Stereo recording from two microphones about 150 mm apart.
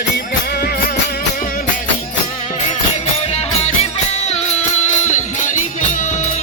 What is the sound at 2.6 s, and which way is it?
Music, 50° left (ahead or behind).